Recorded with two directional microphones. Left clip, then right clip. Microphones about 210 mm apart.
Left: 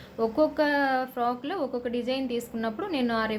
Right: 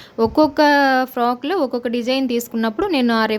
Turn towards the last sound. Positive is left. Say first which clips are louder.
# right 10 dB
turn(degrees=-55)  # may be behind; listen again after turning